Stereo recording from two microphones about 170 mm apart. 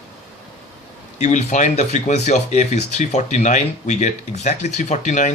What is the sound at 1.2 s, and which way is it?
Speech, 45° left (ahead or behind).